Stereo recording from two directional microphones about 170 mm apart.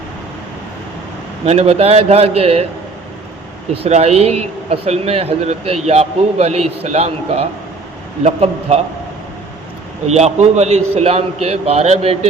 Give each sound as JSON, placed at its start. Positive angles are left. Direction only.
{"t": 1.5, "sound": "a man's voice", "side_deg": -35}
{"t": 3.8, "sound": "a man's voice", "side_deg": -40}
{"t": 10.1, "sound": "a man's voice", "side_deg": -40}